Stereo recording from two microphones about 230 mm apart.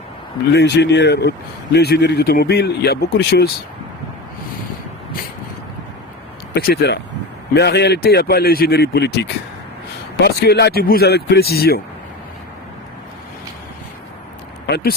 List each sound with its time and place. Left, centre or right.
0.5 s speech: left
6.5 s speech: left